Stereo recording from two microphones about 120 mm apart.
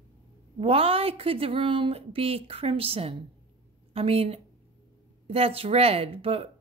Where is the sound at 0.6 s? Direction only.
55° right (ahead or behind).